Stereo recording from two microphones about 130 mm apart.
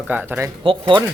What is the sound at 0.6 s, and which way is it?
Speech, 40° right (ahead or behind).